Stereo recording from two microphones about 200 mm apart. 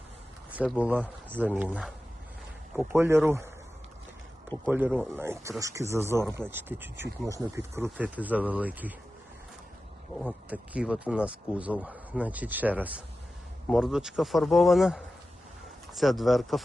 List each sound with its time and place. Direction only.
0.6 s speech: 5° right (ahead or behind)
2.9 s speech: 10° right (ahead or behind)
4.7 s speech: 10° right (ahead or behind)
10.2 s speech: 5° right (ahead or behind)